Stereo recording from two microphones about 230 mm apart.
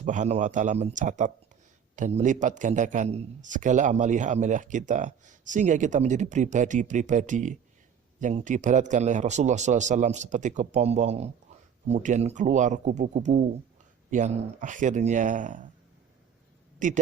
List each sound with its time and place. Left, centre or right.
0.0 s a man's voice: right
16.8 s a man's voice: right